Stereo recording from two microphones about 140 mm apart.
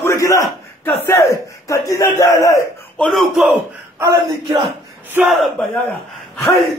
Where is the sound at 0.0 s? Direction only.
20° left (ahead or behind).